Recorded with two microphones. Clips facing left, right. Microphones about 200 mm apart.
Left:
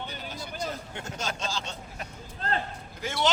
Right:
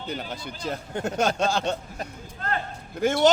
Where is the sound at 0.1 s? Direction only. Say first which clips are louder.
Right 5 dB; 60° right (ahead or behind).